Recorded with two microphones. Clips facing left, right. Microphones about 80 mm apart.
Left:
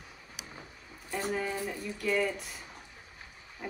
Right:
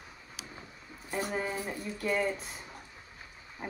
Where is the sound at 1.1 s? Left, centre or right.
Right.